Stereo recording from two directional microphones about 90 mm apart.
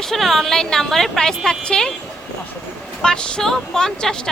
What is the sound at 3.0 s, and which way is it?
Speech, 10° left (ahead or behind).